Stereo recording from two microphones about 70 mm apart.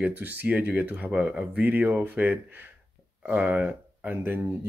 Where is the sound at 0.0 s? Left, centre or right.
Right.